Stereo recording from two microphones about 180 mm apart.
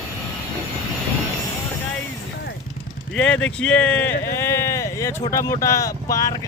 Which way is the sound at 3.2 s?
5° left (ahead or behind).